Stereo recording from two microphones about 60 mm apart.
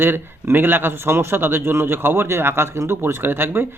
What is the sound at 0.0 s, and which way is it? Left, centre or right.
Speech, right.